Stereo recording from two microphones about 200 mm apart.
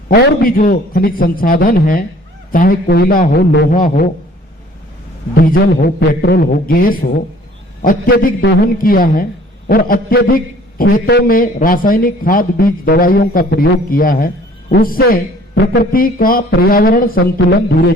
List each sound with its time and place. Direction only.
0.1 s a man's voice: 45° left (ahead or behind)
5.3 s a man's voice: 45° left (ahead or behind)